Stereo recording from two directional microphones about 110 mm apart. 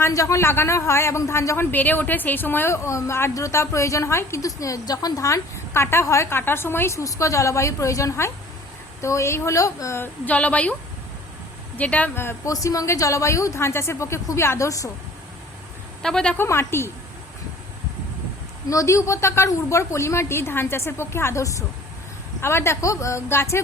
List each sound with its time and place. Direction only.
0.0 s a woman's voice: 30° left (ahead or behind); by 10.8 s 10° left (ahead or behind)
11.8 s a woman's voice: 15° left (ahead or behind); by 14.8 s 30° left (ahead or behind)
16.0 s a woman's voice: 5° left (ahead or behind)
16.4 s a woman's voice: 25° left (ahead or behind)
18.7 s a woman's voice: 30° left (ahead or behind)